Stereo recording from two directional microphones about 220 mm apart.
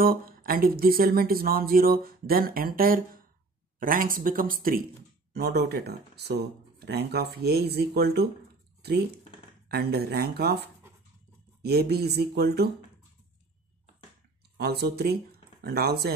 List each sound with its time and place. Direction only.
0.0 s speech: 40° right (ahead or behind)
9.7 s speech: 45° right (ahead or behind)
14.6 s speech: 45° right (ahead or behind)